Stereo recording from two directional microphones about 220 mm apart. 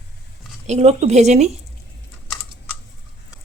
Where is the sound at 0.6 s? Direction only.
30° right (ahead or behind).